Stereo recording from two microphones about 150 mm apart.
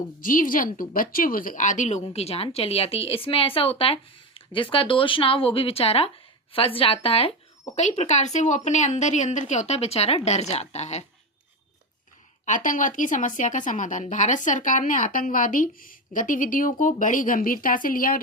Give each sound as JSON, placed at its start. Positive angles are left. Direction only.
{"t": 0.2, "sound": "speech", "side_deg": 65}
{"t": 2.1, "sound": "speech", "side_deg": 40}
{"t": 7.8, "sound": "a woman's voice", "side_deg": 50}
{"t": 12.5, "sound": "speech", "side_deg": 60}